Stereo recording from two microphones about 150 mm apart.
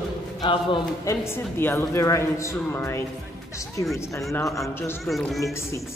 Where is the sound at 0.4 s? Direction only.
35° left (ahead or behind).